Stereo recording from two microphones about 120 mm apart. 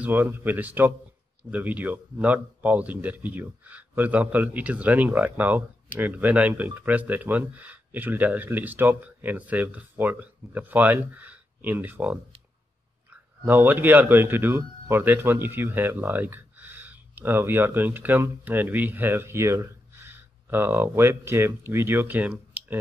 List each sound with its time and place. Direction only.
0.0 s speech: 15° right (ahead or behind)
13.5 s a man's voice: 15° right (ahead or behind)